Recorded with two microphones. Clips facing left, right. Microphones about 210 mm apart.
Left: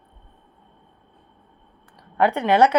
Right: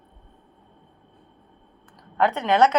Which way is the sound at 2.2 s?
10° left (ahead or behind).